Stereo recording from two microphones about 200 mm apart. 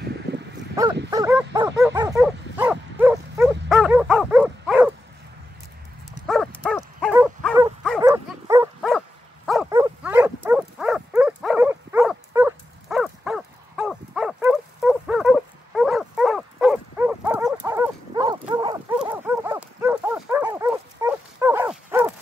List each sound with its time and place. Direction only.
0.3 s a sound: 55° right (ahead or behind)
0.8 s dog: 15° right (ahead or behind)
6.2 s horse: centre (ahead or behind)
7.0 s dog: 5° right (ahead or behind)
8.0 s dog: 15° right (ahead or behind)
9.7 s dog: 15° right (ahead or behind)
17.6 s dog: 15° right (ahead or behind)
18.9 s dog: 10° right (ahead or behind)